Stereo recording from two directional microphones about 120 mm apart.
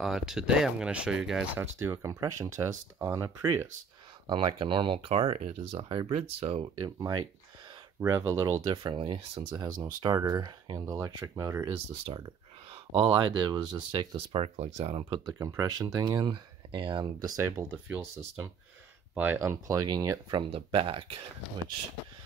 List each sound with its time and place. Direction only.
0.0 s speech: centre (ahead or behind)
1.8 s speech: 25° right (ahead or behind)
4.3 s speech: 45° right (ahead or behind)
6.8 s speech: 40° right (ahead or behind)
8.0 s speech: 20° right (ahead or behind)
8.5 s speech: 40° right (ahead or behind)
9.6 s speech: 35° right (ahead or behind)
11.7 s speech: 55° right (ahead or behind)
12.9 s speech: 40° right (ahead or behind)
14.3 s speech: 60° right (ahead or behind)
15.3 s speech: 25° right (ahead or behind); by 21.2 s 50° right (ahead or behind)